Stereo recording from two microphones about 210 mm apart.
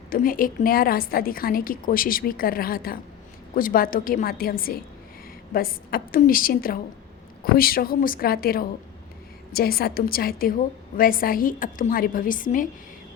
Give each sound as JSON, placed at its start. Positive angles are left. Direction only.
{"t": 0.1, "sound": "a woman's voice", "side_deg": 40}